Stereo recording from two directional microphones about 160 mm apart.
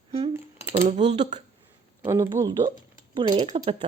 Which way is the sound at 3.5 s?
35° right (ahead or behind).